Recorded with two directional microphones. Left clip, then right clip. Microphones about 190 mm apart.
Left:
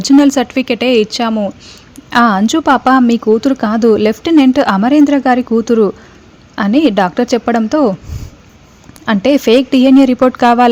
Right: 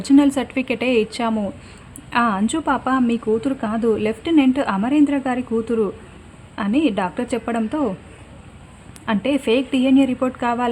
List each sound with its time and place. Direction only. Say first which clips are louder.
0.0 s a woman's voice: left 7 dB; 30° left (ahead or behind)
2.0 s speech: left 9 dB; 35° left (ahead or behind)
9.0 s speech: left 9 dB; 35° left (ahead or behind)